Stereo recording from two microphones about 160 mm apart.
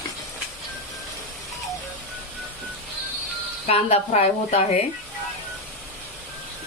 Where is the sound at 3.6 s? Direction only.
40° left (ahead or behind).